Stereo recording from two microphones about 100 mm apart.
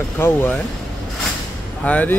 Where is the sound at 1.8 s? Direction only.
15° left (ahead or behind).